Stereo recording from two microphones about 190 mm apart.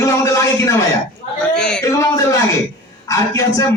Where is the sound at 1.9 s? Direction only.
15° left (ahead or behind).